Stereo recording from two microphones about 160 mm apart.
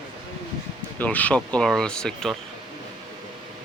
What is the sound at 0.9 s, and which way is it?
Speech, 10° left (ahead or behind).